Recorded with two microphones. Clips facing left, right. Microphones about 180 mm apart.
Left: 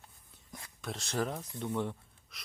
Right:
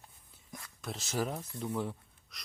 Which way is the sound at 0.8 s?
Centre (ahead or behind).